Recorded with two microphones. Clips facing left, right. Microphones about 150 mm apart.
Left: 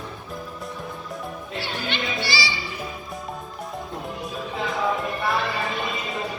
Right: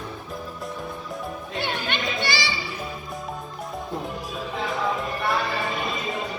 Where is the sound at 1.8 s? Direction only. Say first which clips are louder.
Right 1 dB; 50° right (ahead or behind).